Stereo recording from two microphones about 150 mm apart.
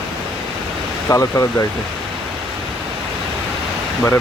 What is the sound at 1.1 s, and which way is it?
Speech, 20° left (ahead or behind).